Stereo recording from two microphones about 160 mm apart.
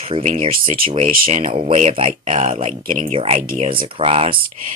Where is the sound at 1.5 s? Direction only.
40° right (ahead or behind).